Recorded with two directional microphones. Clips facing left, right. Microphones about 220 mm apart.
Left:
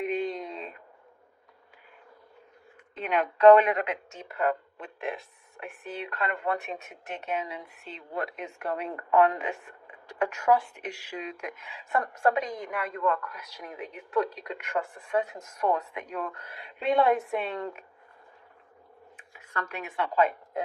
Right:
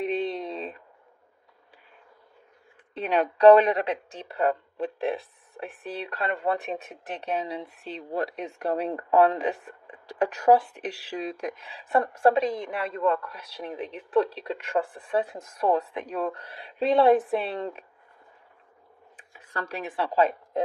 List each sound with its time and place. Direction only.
0.0 s a sound: 35° right (ahead or behind)
2.9 s a woman's voice: 35° right (ahead or behind)
19.1 s speech: 35° right (ahead or behind)